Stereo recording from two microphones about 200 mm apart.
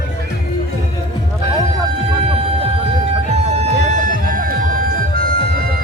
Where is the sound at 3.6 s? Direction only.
40° right (ahead or behind).